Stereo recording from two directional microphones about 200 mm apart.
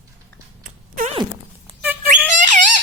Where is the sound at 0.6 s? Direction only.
40° right (ahead or behind).